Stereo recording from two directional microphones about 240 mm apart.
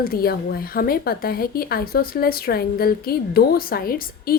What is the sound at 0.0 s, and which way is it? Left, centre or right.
Speech, left.